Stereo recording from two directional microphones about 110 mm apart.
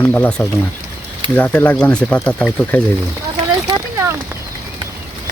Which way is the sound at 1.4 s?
15° left (ahead or behind).